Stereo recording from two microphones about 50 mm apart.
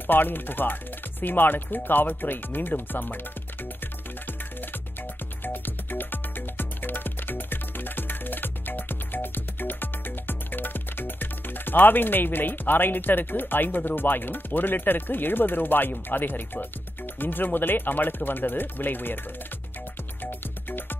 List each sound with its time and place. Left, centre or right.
0.0 s speech: left
3.8 s music: left
20.2 s music: left